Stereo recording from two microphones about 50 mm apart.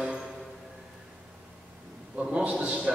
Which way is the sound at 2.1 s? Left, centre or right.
Centre.